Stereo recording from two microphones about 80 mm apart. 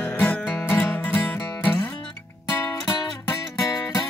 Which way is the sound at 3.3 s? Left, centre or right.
Left.